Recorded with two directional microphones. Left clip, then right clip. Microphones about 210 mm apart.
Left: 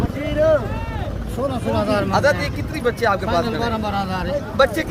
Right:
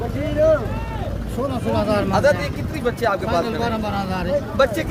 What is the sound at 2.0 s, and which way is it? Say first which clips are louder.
Speech: even; 20° left (ahead or behind).